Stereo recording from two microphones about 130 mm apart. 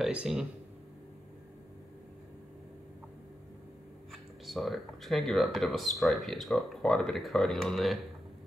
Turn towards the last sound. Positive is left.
turn(degrees=0)  # may be behind; listen again after turning